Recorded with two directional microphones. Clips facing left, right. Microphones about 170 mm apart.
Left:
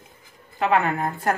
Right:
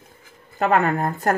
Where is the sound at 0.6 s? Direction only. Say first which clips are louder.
Right 2 dB; 45° right (ahead or behind).